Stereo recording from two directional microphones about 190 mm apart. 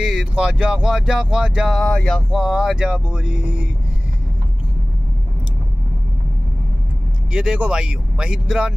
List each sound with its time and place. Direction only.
0.0 s speech: 5° right (ahead or behind)
7.3 s speech: 5° right (ahead or behind)